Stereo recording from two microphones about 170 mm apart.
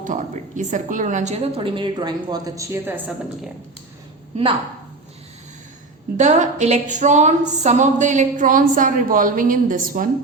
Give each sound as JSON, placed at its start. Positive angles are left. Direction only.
{"t": 0.0, "sound": "a woman's voice", "side_deg": -50}
{"t": 6.1, "sound": "a woman's voice", "side_deg": -45}